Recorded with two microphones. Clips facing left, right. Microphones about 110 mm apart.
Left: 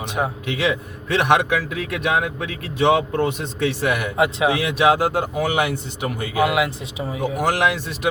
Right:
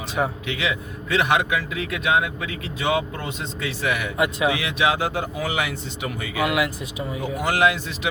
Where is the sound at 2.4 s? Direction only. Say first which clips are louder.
Left 7 dB; 60° left (ahead or behind).